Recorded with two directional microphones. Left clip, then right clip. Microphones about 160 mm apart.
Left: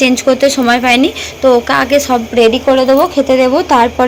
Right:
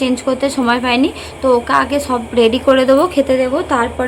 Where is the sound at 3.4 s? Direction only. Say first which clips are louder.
Left 6 dB; 25° left (ahead or behind).